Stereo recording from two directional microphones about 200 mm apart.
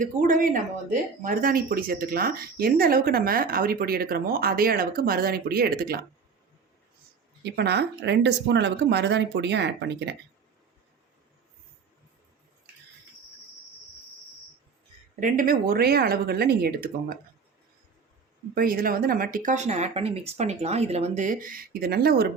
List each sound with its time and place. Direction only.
0.0 s speech: 40° right (ahead or behind)
7.4 s speech: 55° right (ahead or behind)
15.1 s speech: 40° right (ahead or behind)
18.5 s speech: 45° right (ahead or behind)